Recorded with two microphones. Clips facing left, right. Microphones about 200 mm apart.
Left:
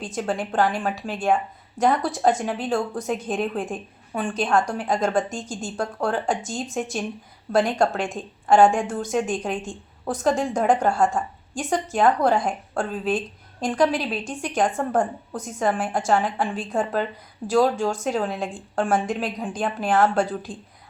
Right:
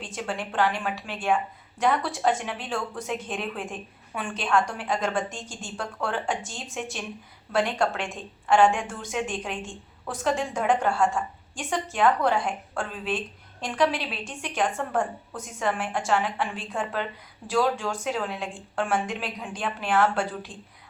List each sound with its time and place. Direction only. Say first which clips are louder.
0.0 s a woman's voice: left 6 dB; 40° left (ahead or behind)